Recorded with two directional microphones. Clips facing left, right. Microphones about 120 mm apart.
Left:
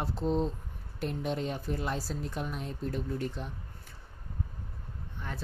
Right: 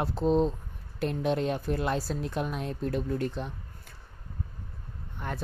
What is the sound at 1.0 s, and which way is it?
Speech, 85° right.